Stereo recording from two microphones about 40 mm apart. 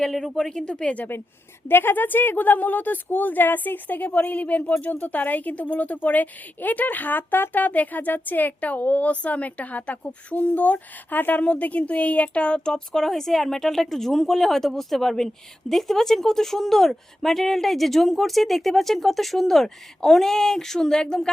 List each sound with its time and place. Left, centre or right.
0.0 s speech: centre
0.6 s speech: left
1.6 s a woman's voice: left
10.3 s a woman's voice: left; by 21.2 s centre